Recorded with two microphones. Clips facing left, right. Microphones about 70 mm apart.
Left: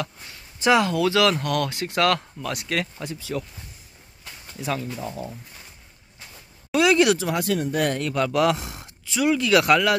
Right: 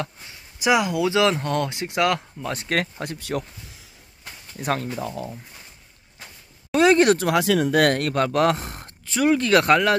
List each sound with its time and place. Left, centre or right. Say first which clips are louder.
0.6 s speech: left 1 dB; centre
2.5 s speech: right 3 dB; right
4.6 s speech: right 3 dB; right
6.7 s speech: right 2 dB; right
7.2 s speech: right 4 dB; right